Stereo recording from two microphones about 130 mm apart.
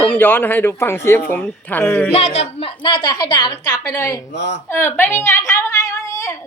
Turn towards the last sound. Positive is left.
turn(degrees=25)  # may be behind; listen again after turning